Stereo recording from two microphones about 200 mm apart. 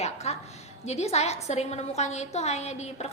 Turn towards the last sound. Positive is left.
turn(degrees=35)  # may be behind; listen again after turning